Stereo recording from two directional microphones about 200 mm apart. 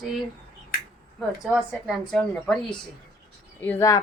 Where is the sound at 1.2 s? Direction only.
Centre (ahead or behind).